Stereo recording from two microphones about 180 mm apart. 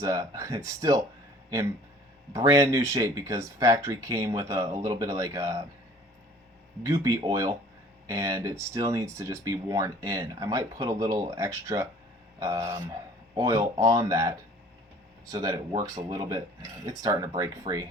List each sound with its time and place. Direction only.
0.0 s speech: 20° right (ahead or behind)
2.3 s speech: 15° right (ahead or behind)
6.8 s speech: 20° right (ahead or behind)